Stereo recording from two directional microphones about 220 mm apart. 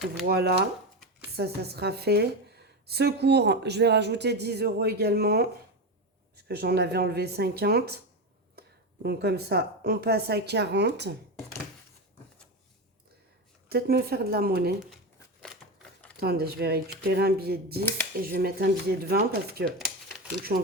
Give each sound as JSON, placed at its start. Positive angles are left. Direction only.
{"t": 0.3, "sound": "a woman's voice", "side_deg": -45}
{"t": 9.0, "sound": "a woman's voice", "side_deg": -45}
{"t": 13.7, "sound": "a woman's voice", "side_deg": -45}
{"t": 16.1, "sound": "a woman's voice", "side_deg": -45}